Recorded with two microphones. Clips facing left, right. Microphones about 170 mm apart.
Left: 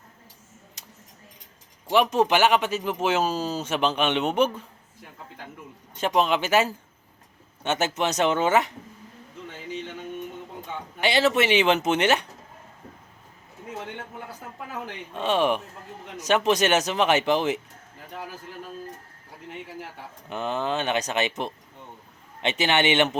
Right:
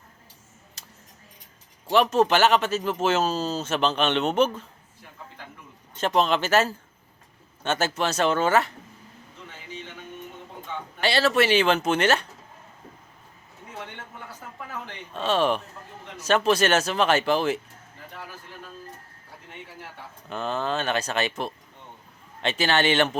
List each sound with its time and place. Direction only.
0.8 s a sound: 15° left (ahead or behind)
1.9 s speech: 15° left (ahead or behind)
6.0 s speech: 10° left (ahead or behind)
11.0 s speech: 15° left (ahead or behind)
14.8 s speech: 15° left (ahead or behind)
20.3 s speech: 15° left (ahead or behind)